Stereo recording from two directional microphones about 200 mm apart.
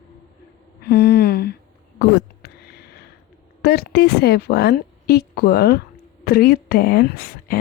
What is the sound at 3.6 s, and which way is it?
A woman's voice, 50° left (ahead or behind).